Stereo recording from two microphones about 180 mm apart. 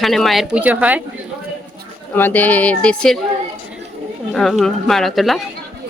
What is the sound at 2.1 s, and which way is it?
A woman's voice, 10° left (ahead or behind).